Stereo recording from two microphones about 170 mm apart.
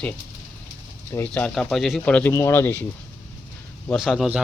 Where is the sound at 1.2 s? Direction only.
10° left (ahead or behind).